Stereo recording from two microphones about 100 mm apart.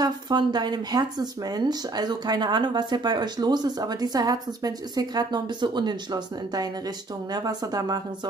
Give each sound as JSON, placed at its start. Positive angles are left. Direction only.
{"t": 0.0, "sound": "speech", "side_deg": -45}